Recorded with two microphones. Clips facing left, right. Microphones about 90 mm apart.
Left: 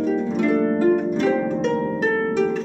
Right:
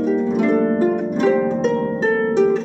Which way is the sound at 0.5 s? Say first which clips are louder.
Right 1 dB; 20° right (ahead or behind).